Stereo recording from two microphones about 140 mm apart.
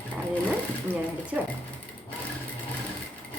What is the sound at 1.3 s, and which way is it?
Speech, 10° right (ahead or behind).